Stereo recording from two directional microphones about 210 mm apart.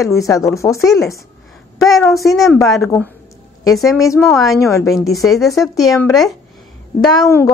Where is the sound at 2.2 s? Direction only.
Centre (ahead or behind).